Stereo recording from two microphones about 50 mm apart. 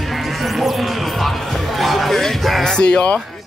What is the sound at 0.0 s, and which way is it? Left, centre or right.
Music, centre.